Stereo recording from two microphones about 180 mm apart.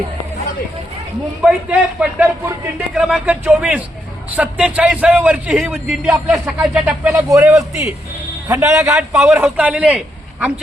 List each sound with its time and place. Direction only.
1.4 s a man's voice: 5° right (ahead or behind)
8.7 s a man's voice: 5° right (ahead or behind)